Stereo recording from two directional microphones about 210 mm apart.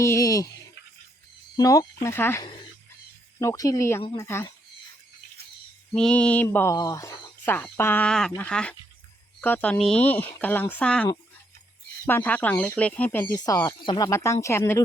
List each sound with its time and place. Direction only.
0.0 s speech: 15° left (ahead or behind)
5.9 s speech: 5° left (ahead or behind)